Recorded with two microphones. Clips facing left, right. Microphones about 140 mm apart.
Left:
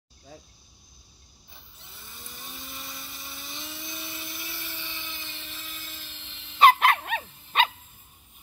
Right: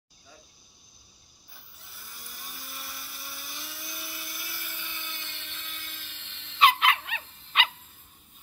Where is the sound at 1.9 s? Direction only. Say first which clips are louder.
Left 2 dB; 20° left (ahead or behind).